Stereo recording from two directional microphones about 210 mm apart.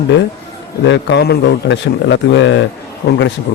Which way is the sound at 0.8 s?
55° left (ahead or behind).